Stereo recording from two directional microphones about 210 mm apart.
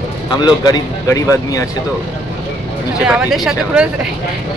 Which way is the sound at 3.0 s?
5° right (ahead or behind).